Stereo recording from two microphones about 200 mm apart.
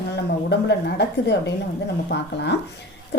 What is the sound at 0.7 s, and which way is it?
A woman's voice, 60° left (ahead or behind).